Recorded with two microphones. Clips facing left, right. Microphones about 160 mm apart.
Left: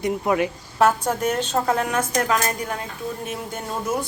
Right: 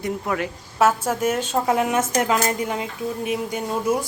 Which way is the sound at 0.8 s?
5° right (ahead or behind).